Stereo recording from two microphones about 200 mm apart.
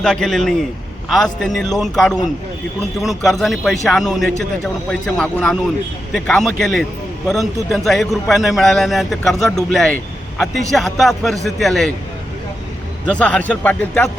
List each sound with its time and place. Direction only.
0.0 s a man's voice: 5° left (ahead or behind)
13.1 s a man's voice: 5° left (ahead or behind)